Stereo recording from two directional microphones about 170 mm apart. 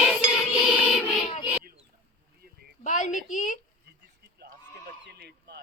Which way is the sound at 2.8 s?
45° left (ahead or behind).